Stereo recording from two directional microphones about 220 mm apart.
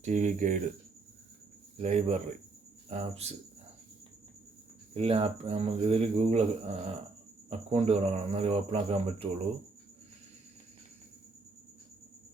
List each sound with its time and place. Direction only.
0.0 s speech: 35° right (ahead or behind)
1.8 s speech: 30° right (ahead or behind)
4.9 s speech: 25° right (ahead or behind)